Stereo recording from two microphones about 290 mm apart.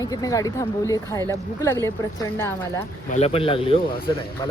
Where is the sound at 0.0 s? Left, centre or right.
Centre.